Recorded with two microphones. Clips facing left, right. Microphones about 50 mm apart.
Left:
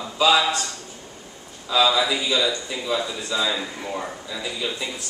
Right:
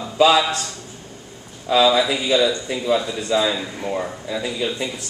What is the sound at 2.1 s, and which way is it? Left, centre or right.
Speech, centre.